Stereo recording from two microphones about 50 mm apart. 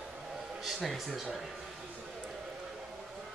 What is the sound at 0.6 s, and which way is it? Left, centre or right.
Speech, centre.